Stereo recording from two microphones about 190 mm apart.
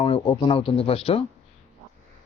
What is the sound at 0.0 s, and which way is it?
Speech, 25° left (ahead or behind).